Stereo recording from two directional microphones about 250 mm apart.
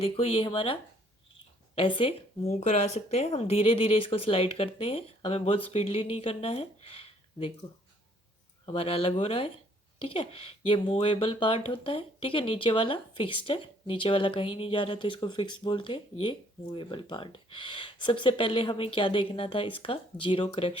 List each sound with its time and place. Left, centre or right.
0.0 s speech: left
8.6 s speech: left